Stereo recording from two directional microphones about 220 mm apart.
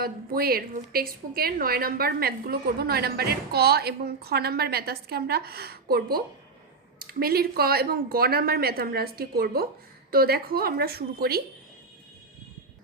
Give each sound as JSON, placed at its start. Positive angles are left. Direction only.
{"t": 0.0, "sound": "a woman's voice", "side_deg": -45}